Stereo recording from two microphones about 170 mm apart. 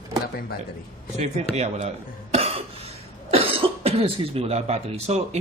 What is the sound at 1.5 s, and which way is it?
Speech, 40° right (ahead or behind).